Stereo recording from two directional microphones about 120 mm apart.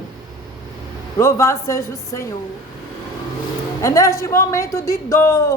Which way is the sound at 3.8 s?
25° left (ahead or behind).